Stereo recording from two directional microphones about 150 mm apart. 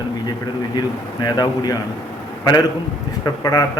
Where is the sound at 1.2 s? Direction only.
25° left (ahead or behind).